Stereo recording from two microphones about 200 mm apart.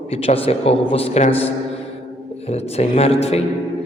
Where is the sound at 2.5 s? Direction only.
30° left (ahead or behind).